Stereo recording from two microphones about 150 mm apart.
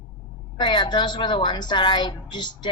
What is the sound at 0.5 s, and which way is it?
A woman's voice, 30° left (ahead or behind).